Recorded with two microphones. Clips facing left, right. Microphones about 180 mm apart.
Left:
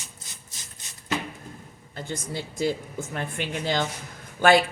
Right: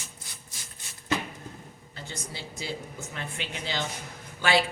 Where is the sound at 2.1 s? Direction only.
50° left (ahead or behind).